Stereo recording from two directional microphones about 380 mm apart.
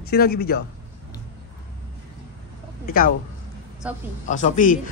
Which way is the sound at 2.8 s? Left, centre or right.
Left.